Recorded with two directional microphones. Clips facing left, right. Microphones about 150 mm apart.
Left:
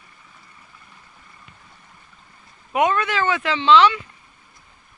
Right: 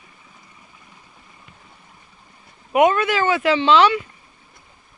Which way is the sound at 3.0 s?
10° right (ahead or behind).